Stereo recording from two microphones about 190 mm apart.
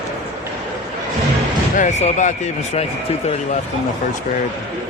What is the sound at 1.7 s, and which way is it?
Speech, 40° left (ahead or behind).